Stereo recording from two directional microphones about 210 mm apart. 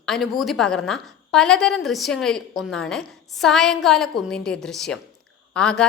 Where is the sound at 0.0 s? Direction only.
Centre (ahead or behind).